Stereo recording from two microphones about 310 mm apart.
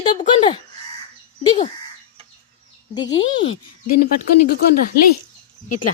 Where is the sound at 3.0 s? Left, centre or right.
Centre.